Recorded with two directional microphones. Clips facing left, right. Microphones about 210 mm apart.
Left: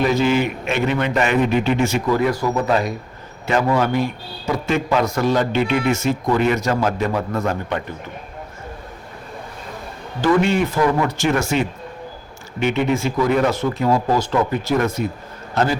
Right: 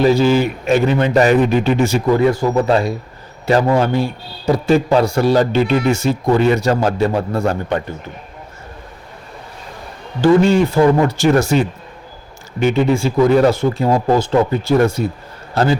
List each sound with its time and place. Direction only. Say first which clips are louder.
0.0 s a man's voice: right 5 dB; 35° right (ahead or behind)
10.2 s a man's voice: right 5 dB; 35° right (ahead or behind)